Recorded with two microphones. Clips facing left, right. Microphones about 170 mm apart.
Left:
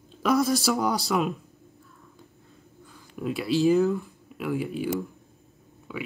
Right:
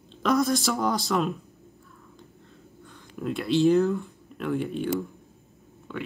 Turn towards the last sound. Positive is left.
turn(degrees=5)  # may be behind; listen again after turning